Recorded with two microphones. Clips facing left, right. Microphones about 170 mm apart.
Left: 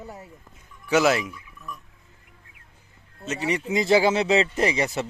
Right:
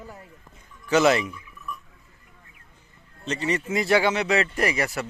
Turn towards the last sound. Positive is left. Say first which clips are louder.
# left 2 dB
turn(degrees=20)  # may be behind; listen again after turning